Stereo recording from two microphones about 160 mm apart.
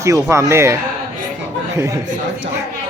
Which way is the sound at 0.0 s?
20° right (ahead or behind).